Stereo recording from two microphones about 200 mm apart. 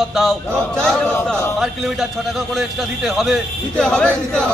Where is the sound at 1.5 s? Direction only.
Centre (ahead or behind).